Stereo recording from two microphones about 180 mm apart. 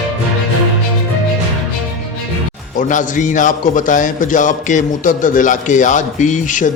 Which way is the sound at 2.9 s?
45° left (ahead or behind).